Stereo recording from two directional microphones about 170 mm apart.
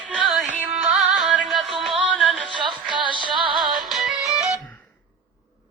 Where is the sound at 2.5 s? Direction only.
25° right (ahead or behind).